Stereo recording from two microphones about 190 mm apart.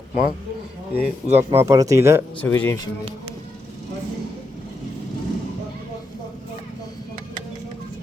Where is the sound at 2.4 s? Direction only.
10° left (ahead or behind).